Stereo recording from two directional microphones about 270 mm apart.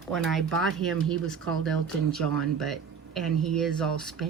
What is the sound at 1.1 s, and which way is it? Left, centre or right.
Speech, right.